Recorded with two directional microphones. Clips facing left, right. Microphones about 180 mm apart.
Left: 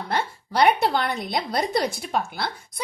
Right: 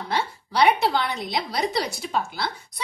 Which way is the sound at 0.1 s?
55° left (ahead or behind).